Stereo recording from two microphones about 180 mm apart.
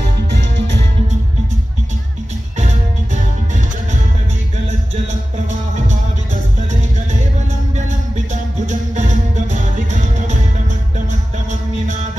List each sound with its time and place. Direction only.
7.7 s music: 40° right (ahead or behind)